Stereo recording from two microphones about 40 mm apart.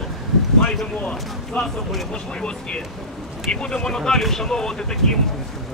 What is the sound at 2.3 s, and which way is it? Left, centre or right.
Speech, left.